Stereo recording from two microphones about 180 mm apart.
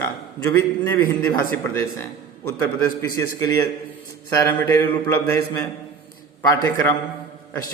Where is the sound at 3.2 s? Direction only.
20° left (ahead or behind).